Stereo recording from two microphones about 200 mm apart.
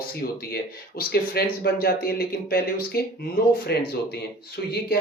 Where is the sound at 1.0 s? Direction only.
50° left (ahead or behind).